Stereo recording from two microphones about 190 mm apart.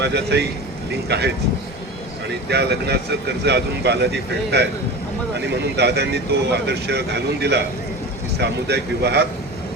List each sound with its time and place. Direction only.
0.0 s speech: 60° right (ahead or behind)
2.5 s speech: 60° right (ahead or behind)